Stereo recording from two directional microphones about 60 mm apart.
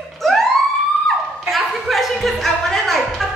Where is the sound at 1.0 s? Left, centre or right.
Centre.